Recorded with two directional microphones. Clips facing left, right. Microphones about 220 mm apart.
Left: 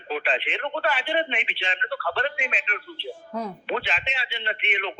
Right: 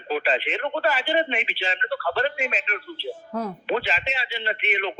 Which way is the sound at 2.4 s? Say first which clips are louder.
Right 4 dB; 40° right (ahead or behind).